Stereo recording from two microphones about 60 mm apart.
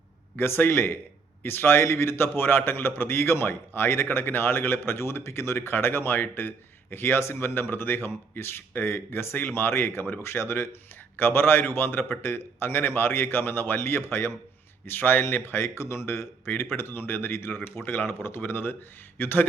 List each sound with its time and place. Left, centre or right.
0.3 s a man's voice: left